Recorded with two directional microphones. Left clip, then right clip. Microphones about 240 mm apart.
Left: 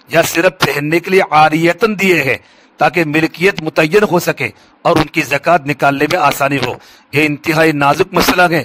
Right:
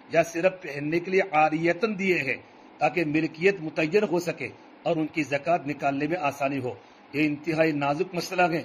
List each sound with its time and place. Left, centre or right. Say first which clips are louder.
0.1 s a man's voice: left 12 dB; left